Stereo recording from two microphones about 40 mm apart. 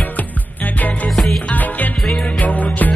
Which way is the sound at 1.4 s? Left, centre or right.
Left.